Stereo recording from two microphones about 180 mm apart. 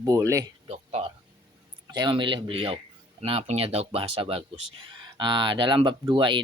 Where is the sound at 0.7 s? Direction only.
35° right (ahead or behind).